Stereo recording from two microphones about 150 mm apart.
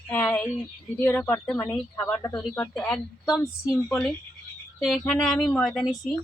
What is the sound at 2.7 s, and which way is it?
A woman's voice, 5° left (ahead or behind).